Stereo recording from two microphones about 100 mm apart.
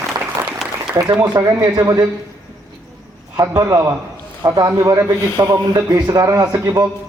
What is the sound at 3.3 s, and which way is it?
Speech, 35° right (ahead or behind).